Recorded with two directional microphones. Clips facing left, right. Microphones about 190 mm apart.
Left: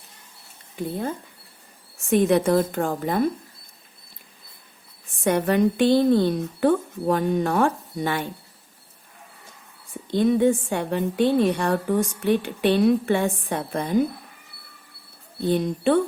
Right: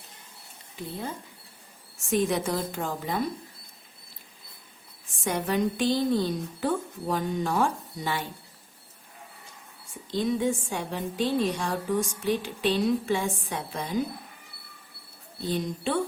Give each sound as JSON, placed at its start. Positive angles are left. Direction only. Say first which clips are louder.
{"t": 0.8, "sound": "a woman's voice", "louder": "left 7 dB", "side_deg": 50}
{"t": 5.2, "sound": "a woman's voice", "louder": "left 7 dB", "side_deg": 60}
{"t": 10.1, "sound": "a woman's voice", "louder": "left 7 dB", "side_deg": 60}
{"t": 15.4, "sound": "a woman's voice", "louder": "left 8 dB", "side_deg": 60}